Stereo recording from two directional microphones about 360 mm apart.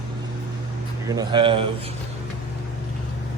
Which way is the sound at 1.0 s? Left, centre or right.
Centre.